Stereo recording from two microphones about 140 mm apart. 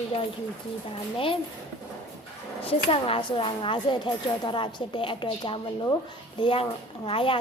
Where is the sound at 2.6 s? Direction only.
40° left (ahead or behind).